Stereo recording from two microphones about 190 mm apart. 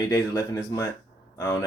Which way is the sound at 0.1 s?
15° left (ahead or behind).